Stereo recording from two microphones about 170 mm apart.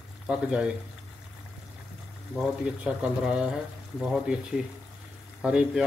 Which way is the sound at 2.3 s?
5° right (ahead or behind).